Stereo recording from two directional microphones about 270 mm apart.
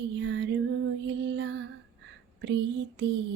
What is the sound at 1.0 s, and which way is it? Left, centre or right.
Music, right.